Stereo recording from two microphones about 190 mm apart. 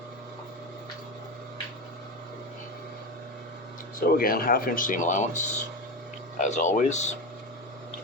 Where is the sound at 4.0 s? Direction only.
50° left (ahead or behind).